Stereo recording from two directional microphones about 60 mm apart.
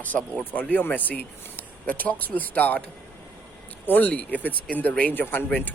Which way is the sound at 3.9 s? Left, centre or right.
Left.